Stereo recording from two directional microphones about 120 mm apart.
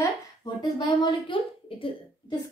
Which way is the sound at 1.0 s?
40° left (ahead or behind).